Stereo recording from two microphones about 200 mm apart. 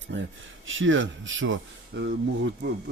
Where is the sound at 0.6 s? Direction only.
75° right (ahead or behind).